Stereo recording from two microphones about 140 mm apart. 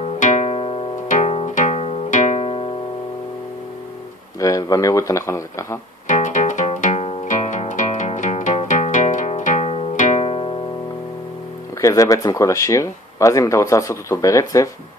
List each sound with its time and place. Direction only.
0.0 s music: 60° left (ahead or behind); by 0.8 s 40° left (ahead or behind)
1.0 s music: 55° left (ahead or behind)
4.4 s speech: 25° left (ahead or behind)
6.0 s music: 60° left (ahead or behind)
7.2 s music: 65° left (ahead or behind)
9.9 s music: 65° left (ahead or behind)
10.2 s music: 40° left (ahead or behind)
11.8 s speech: 25° left (ahead or behind)